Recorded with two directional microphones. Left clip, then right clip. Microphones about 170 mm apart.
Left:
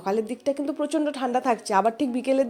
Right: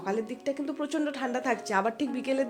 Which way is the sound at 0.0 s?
25° left (ahead or behind).